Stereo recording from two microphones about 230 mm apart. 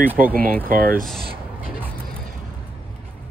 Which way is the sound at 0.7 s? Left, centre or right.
Right.